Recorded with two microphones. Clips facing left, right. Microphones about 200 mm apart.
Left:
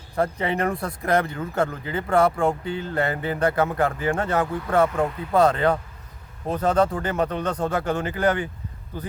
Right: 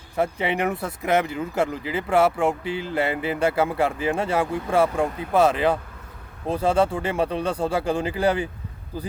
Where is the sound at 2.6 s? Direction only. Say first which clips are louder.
Right 1 dB; 85° right.